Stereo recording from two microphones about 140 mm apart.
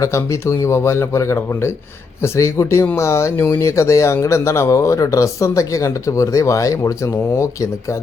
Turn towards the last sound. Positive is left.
turn(degrees=20)  # may be behind; listen again after turning